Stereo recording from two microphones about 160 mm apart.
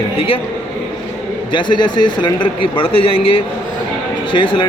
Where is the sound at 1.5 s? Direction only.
30° left (ahead or behind).